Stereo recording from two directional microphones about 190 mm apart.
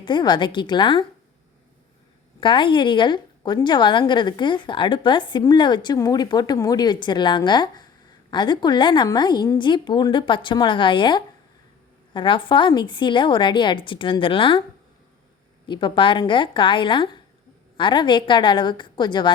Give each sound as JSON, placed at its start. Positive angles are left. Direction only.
{"t": 0.0, "sound": "a woman's voice", "side_deg": 25}
{"t": 2.4, "sound": "a woman's voice", "side_deg": 25}
{"t": 15.6, "sound": "a woman's voice", "side_deg": 25}